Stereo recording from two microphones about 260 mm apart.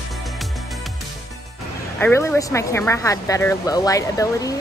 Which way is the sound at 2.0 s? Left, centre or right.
Centre.